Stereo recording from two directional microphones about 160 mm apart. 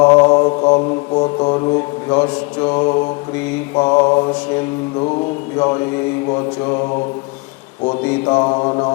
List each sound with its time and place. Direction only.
0.0 s mantra: 30° left (ahead or behind)
5.5 s mantra: 25° left (ahead or behind)
7.9 s mantra: 30° left (ahead or behind)